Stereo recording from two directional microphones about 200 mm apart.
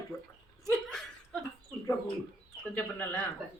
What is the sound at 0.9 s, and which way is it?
Chuckle, 5° left (ahead or behind).